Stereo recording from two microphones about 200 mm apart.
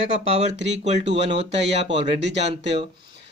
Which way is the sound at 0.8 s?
35° right (ahead or behind).